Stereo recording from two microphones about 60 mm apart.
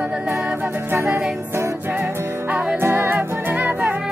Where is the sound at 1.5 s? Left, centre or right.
Right.